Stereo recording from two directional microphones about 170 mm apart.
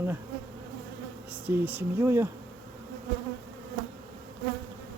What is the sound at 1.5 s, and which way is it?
Speech, 10° right (ahead or behind).